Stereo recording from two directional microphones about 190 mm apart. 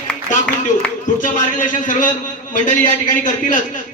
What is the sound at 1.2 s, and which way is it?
A man's voice, 45° left (ahead or behind).